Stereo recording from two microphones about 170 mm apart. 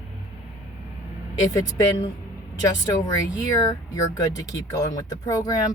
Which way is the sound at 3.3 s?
20° left (ahead or behind).